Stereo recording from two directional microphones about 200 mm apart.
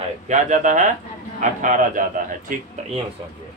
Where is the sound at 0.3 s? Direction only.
40° right (ahead or behind).